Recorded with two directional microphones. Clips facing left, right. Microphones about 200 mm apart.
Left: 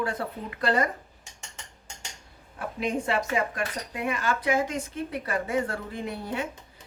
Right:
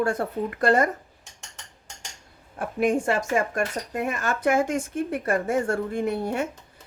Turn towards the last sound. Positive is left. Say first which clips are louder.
# right 6 dB
turn(degrees=-45)  # may be behind; listen again after turning